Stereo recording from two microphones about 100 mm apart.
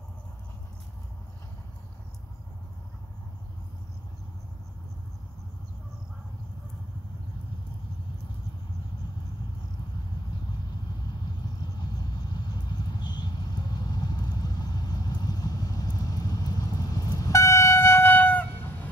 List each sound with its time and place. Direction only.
11.8 s vehicle: 45° left (ahead or behind); by 18.7 s 15° left (ahead or behind)